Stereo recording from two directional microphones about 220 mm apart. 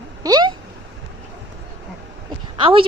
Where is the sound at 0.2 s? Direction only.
15° right (ahead or behind).